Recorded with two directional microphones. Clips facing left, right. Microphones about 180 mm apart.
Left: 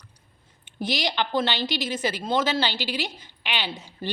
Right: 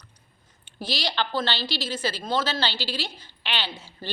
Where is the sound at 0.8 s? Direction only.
20° left (ahead or behind).